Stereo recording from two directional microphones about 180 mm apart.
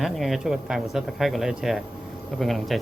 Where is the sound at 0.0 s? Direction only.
Centre (ahead or behind).